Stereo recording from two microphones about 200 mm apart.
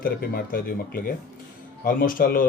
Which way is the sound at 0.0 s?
50° left (ahead or behind).